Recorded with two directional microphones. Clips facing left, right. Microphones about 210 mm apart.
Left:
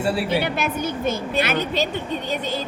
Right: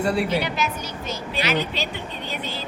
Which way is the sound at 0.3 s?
55° left (ahead or behind).